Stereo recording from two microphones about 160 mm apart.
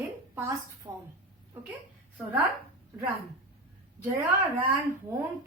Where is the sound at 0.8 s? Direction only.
30° right (ahead or behind).